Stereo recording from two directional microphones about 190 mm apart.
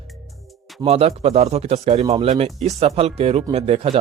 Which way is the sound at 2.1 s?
25° right (ahead or behind).